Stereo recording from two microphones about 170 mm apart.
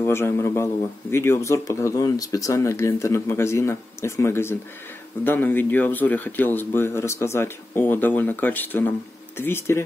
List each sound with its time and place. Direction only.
0.0 s speech: 15° left (ahead or behind)